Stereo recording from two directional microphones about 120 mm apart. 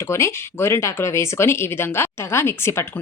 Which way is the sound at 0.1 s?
20° left (ahead or behind).